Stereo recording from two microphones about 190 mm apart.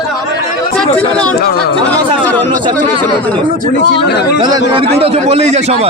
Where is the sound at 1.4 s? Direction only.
55° left (ahead or behind).